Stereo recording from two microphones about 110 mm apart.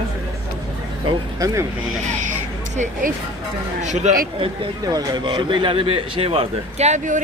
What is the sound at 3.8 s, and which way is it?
Speech, 90° right.